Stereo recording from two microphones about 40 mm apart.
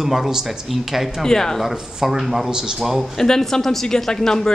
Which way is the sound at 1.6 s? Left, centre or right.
Centre.